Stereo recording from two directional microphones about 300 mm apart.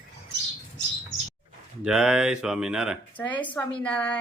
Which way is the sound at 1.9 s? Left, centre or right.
Centre.